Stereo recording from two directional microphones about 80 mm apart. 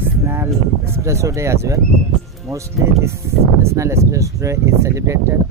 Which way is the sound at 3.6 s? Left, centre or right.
Right.